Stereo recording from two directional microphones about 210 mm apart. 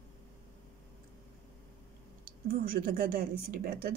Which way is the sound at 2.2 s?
45° right (ahead or behind).